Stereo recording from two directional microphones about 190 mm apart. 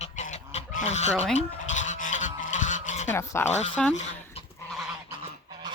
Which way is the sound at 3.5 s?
35° left (ahead or behind).